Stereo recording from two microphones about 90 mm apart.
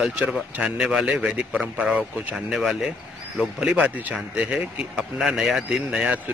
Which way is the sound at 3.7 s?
15° right (ahead or behind).